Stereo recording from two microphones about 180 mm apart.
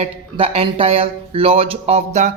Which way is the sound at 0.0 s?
35° right (ahead or behind).